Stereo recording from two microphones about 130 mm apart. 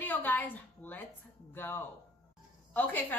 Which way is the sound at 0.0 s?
15° left (ahead or behind).